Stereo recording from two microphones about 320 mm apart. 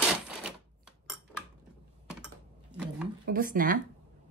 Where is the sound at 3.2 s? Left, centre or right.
Right.